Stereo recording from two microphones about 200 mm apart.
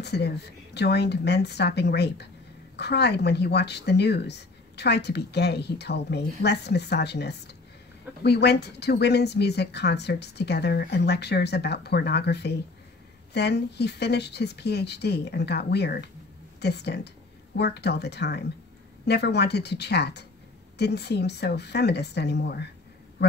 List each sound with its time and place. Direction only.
0.0 s speech: 55° left (ahead or behind)